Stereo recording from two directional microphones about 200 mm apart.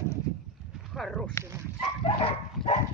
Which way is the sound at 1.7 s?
30° left (ahead or behind).